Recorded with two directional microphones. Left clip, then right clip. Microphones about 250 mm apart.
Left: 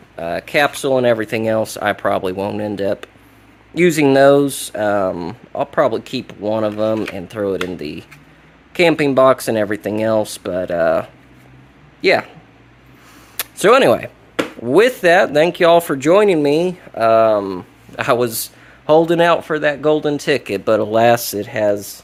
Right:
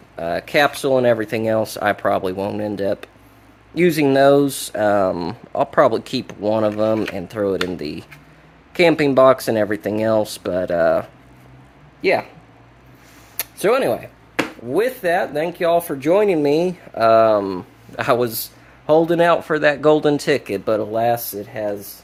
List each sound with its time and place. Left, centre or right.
0.2 s speech: centre
13.3 s speech: centre; by 21.8 s left